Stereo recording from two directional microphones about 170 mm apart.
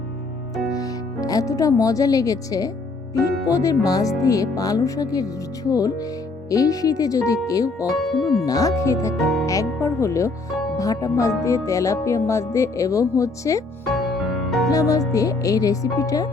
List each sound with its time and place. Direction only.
0.7 s speech: 20° left (ahead or behind)
7.9 s speech: centre (ahead or behind)
8.4 s speech: 20° left (ahead or behind)
13.9 s music: centre (ahead or behind)
14.7 s speech: 20° left (ahead or behind)